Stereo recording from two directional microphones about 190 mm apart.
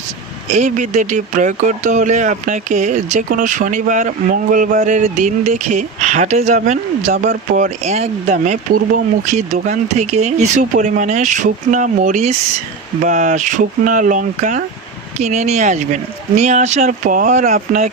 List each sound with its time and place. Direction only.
0.5 s speech: 40° right (ahead or behind)